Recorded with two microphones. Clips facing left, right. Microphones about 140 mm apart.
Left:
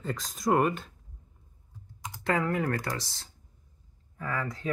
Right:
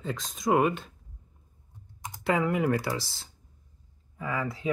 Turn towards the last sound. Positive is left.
turn(degrees=-5)  # may be behind; listen again after turning